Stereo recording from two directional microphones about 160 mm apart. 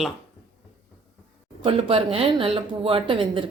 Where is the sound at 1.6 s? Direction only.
35° right (ahead or behind).